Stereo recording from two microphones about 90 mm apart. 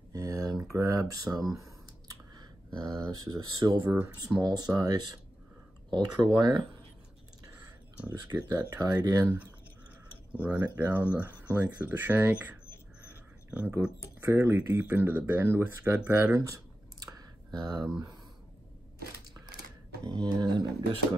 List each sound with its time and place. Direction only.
0.1 s a sound: 45° right (ahead or behind)
0.7 s speech: 40° right (ahead or behind); by 6.6 s 55° right (ahead or behind)
8.3 s speech: 35° right (ahead or behind)
9.2 s speech: 20° right (ahead or behind)
13.5 s speech: 15° right (ahead or behind)
16.3 s typing: 35° right (ahead or behind)
17.5 s speech: 50° right (ahead or behind)
20.1 s speech: 50° right (ahead or behind)